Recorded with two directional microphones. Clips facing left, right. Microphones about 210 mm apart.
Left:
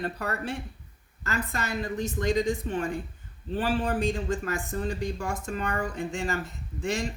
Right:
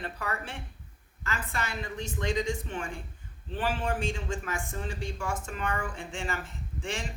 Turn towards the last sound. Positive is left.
turn(degrees=40)  # may be behind; listen again after turning